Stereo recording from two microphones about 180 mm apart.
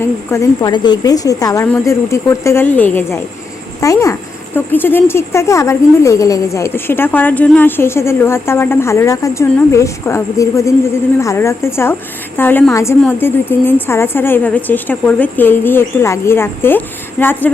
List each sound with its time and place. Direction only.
0.0 s a woman's voice: 15° left (ahead or behind)